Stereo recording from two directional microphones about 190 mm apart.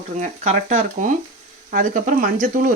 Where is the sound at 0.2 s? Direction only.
35° right (ahead or behind).